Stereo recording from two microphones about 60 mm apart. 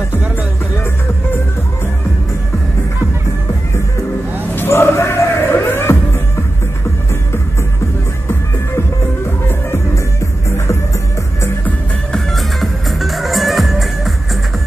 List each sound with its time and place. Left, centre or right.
4.6 s music: left
12.1 s music: centre